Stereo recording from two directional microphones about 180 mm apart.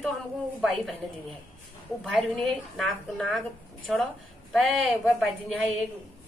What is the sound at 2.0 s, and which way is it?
A woman's voice, centre (ahead or behind).